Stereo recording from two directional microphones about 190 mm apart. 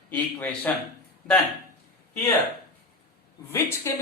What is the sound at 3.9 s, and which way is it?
Speech, 15° left (ahead or behind).